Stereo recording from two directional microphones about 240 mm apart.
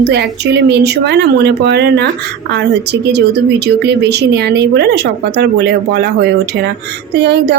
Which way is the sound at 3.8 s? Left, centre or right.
Right.